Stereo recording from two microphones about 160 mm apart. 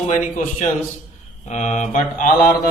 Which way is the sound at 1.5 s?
45° left (ahead or behind).